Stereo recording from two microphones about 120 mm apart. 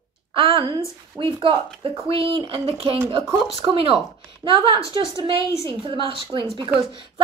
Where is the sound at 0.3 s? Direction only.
50° right (ahead or behind).